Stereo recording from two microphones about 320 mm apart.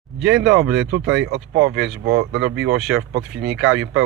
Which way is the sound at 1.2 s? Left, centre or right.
Right.